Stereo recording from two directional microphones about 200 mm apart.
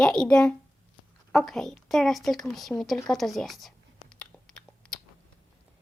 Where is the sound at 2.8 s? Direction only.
Centre (ahead or behind).